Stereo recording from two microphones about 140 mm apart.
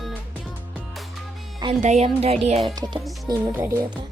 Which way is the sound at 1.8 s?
50° right (ahead or behind).